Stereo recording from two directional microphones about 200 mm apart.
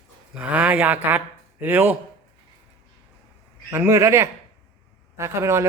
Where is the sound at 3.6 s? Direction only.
15° right (ahead or behind).